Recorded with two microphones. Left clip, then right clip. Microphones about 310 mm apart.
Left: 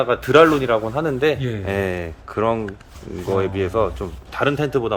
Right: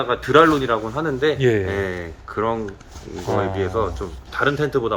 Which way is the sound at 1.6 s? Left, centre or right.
Left.